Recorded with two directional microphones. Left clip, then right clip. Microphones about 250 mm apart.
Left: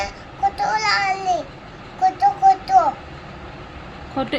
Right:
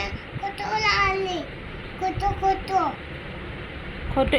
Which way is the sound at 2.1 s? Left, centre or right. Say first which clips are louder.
Left 8 dB; centre.